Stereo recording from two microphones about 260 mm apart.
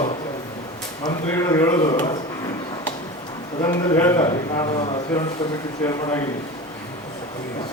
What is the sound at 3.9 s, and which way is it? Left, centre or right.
Speech, centre.